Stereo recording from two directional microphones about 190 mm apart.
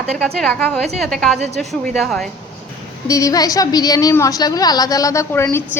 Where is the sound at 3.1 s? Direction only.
20° left (ahead or behind).